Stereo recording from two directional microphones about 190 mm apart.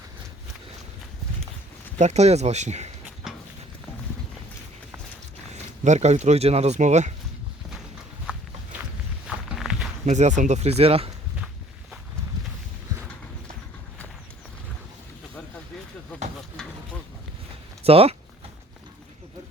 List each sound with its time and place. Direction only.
2.0 s speech: 35° right (ahead or behind)
5.8 s speech: 35° right (ahead or behind)
9.2 s walk: 5° right (ahead or behind)
10.1 s speech: 40° right (ahead or behind)
17.8 s speech: 30° right (ahead or behind)